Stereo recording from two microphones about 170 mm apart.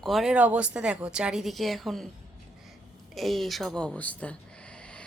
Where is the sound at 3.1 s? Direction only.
Centre (ahead or behind).